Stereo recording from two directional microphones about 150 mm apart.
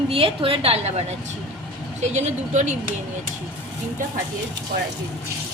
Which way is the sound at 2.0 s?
50° right (ahead or behind).